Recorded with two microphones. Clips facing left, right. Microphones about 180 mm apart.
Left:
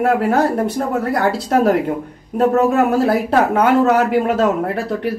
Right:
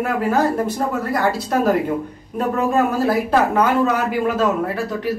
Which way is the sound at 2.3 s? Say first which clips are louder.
Left 5 dB; 75° left (ahead or behind).